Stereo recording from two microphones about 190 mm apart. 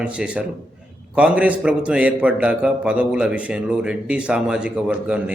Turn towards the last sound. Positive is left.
turn(degrees=-5)  # may be behind; listen again after turning